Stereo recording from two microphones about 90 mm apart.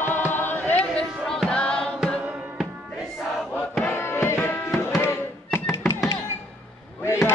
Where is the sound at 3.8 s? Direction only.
25° left (ahead or behind).